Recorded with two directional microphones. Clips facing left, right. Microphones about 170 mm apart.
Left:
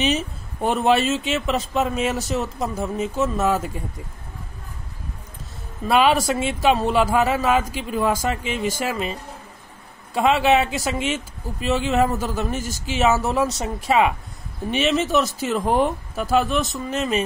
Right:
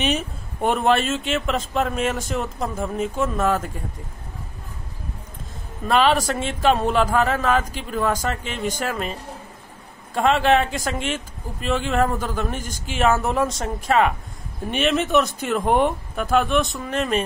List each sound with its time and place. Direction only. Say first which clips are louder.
0.7 s speech: left 1 dB; 5° left (ahead or behind)
5.9 s speech: left 1 dB; 10° left (ahead or behind)
10.1 s speech: even; 5° left (ahead or behind)